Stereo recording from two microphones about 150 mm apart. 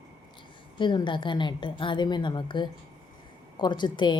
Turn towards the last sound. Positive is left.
turn(degrees=30)  # may be behind; listen again after turning